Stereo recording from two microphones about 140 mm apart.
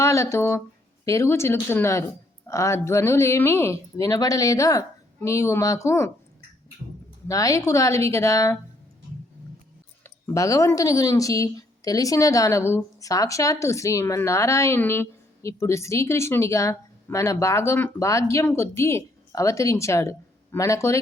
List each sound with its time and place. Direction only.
0.0 s speech: 20° left (ahead or behind)
7.3 s speech: 25° left (ahead or behind)
10.0 s speech: 20° left (ahead or behind)